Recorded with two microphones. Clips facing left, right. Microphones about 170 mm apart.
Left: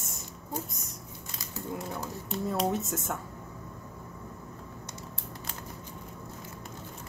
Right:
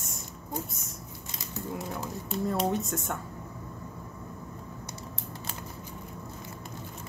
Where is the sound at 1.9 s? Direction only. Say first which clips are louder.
Right 1 dB; centre (ahead or behind).